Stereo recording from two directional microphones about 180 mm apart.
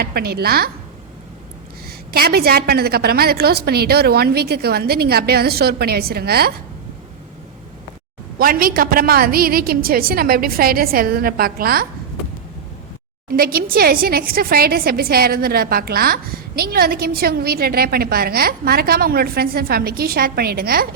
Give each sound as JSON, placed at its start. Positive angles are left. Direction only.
{"t": 0.0, "sound": "a woman's voice", "side_deg": -60}
{"t": 2.1, "sound": "a woman's voice", "side_deg": -60}
{"t": 8.4, "sound": "a woman's voice", "side_deg": -55}
{"t": 13.2, "sound": "a woman's voice", "side_deg": -55}